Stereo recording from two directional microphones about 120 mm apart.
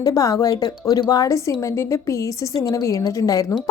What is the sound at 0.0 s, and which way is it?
A woman's voice, 30° left (ahead or behind).